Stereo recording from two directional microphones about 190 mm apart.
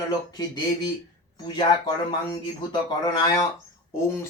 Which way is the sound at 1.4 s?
25° left (ahead or behind).